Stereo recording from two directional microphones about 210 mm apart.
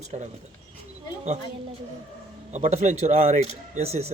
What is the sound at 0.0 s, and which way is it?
Speech, 35° right (ahead or behind).